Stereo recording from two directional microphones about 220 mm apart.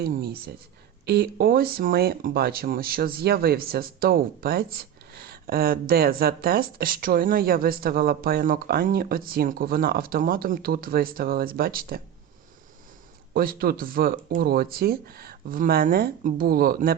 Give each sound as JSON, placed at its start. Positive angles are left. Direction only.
{"t": 0.0, "sound": "speech", "side_deg": -45}
{"t": 13.3, "sound": "speech", "side_deg": -40}